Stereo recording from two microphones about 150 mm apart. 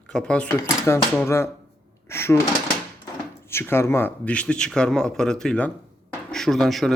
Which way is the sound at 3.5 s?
15° left (ahead or behind).